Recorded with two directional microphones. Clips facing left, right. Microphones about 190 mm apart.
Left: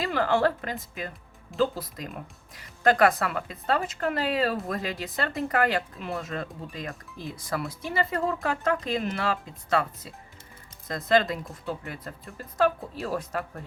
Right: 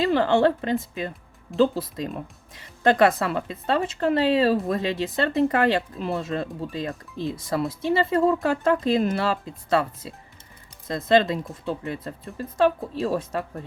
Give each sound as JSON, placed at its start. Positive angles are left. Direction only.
{"t": 0.0, "sound": "speech", "side_deg": -25}